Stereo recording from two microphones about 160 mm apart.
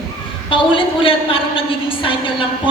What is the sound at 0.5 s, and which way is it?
A woman's voice, 35° left (ahead or behind).